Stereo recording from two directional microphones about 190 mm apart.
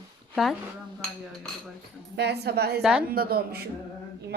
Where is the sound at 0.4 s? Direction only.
5° right (ahead or behind).